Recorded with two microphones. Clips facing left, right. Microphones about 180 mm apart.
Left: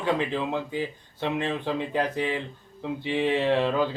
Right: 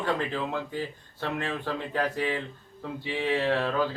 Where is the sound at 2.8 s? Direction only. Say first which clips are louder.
Left 4 dB; centre (ahead or behind).